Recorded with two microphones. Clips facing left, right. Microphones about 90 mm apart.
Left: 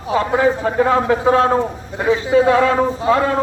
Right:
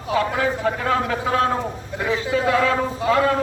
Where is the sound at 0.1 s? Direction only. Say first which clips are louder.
Left 5 dB; 25° left (ahead or behind).